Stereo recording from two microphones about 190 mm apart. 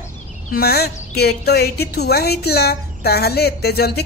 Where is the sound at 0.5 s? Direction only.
55° left (ahead or behind).